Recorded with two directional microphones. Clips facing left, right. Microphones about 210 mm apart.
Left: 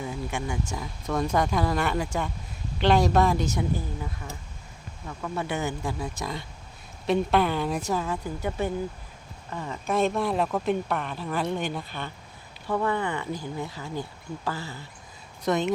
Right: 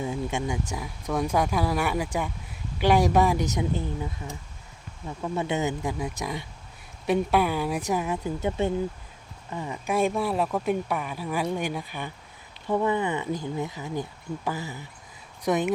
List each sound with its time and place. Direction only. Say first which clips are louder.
0.0 s speech: right 3 dB; 25° right (ahead or behind)